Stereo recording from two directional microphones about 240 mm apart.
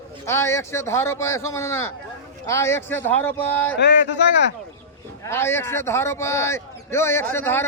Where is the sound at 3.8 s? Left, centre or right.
Left.